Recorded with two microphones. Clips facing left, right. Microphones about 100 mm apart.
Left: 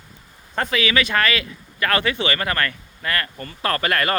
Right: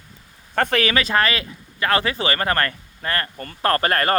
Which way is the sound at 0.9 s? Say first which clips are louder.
Even; 35° right (ahead or behind).